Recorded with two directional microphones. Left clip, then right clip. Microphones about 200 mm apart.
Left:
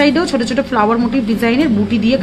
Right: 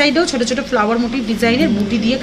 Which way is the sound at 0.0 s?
50° left (ahead or behind).